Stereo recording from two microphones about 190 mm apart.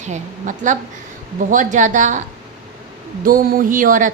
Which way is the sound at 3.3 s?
45° right (ahead or behind).